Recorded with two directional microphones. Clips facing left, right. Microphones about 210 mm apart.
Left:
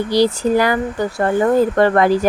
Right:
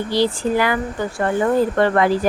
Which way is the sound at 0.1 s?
40° left (ahead or behind).